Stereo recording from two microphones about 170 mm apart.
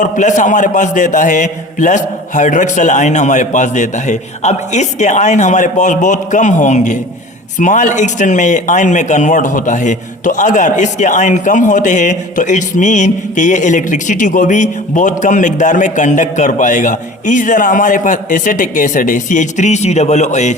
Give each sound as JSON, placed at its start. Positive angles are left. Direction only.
{"t": 0.0, "sound": "a man's voice", "side_deg": 45}